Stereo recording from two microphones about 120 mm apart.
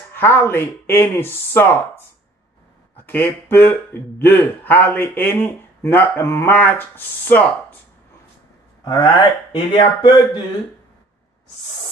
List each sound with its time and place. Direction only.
0.1 s a man's voice: 20° left (ahead or behind)
8.8 s speech: 40° left (ahead or behind)